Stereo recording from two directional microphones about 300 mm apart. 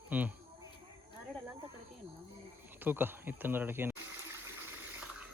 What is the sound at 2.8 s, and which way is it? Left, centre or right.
Speech, centre.